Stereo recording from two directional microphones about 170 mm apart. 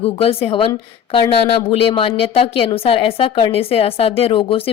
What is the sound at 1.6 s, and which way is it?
A woman's voice, 30° left (ahead or behind).